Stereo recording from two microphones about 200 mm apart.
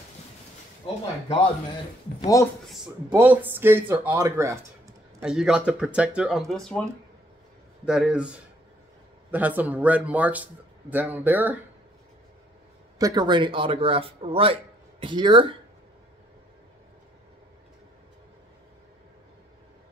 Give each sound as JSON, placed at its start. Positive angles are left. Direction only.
{"t": 2.1, "sound": "speech", "side_deg": 20}
{"t": 3.2, "sound": "speech", "side_deg": -10}
{"t": 5.2, "sound": "speech", "side_deg": -5}
{"t": 13.0, "sound": "a man's voice", "side_deg": -20}